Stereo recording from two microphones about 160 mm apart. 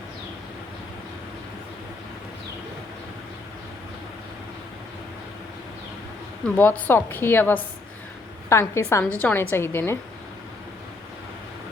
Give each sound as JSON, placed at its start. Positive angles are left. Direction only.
{"t": 6.5, "sound": "a woman's voice", "side_deg": 10}